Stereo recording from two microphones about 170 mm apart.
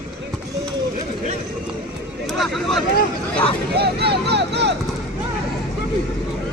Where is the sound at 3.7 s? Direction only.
70° right (ahead or behind).